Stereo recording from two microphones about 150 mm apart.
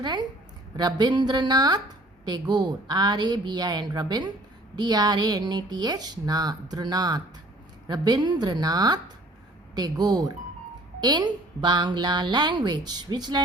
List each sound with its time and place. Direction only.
0.0 s speech: 30° right (ahead or behind)